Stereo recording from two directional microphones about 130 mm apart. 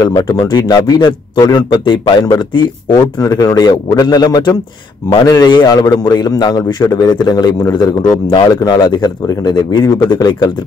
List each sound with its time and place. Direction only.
0.0 s a man's voice: 30° left (ahead or behind)